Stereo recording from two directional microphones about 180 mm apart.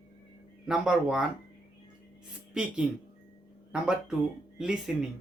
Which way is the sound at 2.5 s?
5° right (ahead or behind).